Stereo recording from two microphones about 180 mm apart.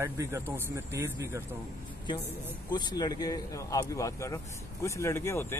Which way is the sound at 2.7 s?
25° left (ahead or behind).